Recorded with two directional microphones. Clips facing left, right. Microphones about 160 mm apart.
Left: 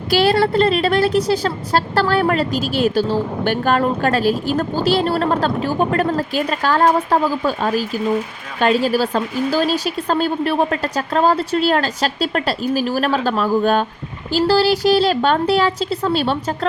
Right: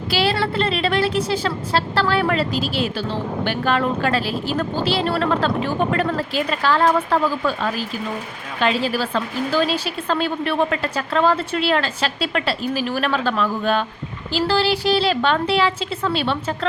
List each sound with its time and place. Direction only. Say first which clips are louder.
0.1 s a woman's voice: left 6 dB; 45° left (ahead or behind)